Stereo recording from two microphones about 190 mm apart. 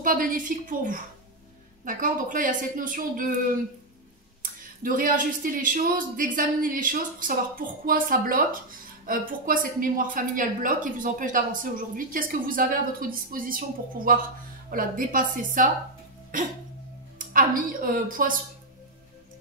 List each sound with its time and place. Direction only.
0.0 s a woman's voice: 45° right (ahead or behind)
4.4 s a woman's voice: 45° right (ahead or behind)